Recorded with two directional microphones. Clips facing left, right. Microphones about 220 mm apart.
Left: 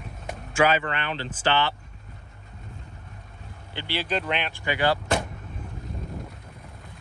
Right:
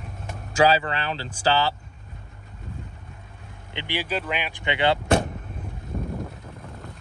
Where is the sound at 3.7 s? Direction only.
15° right (ahead or behind).